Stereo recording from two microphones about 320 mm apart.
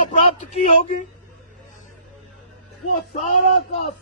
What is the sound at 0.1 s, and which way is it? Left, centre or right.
Speech, left.